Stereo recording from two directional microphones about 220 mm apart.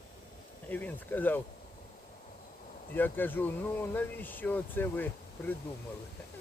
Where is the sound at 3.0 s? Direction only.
10° left (ahead or behind).